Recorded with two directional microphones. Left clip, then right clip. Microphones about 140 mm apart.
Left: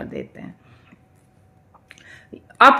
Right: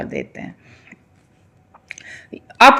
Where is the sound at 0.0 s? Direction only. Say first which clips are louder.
Right 5 dB; 35° right (ahead or behind).